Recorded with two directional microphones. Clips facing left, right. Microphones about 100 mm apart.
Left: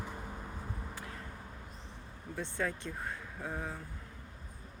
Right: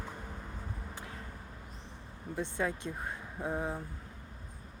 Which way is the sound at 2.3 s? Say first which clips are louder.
Right 2 dB; 15° right (ahead or behind).